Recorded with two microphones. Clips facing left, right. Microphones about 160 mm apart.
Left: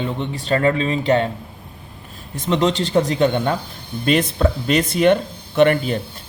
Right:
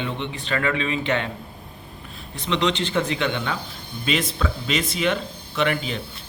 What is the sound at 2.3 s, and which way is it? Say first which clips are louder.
Speech: left 5 dB; 45° left (ahead or behind).